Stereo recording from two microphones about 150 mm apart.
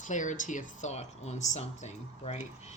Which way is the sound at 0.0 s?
55° left (ahead or behind).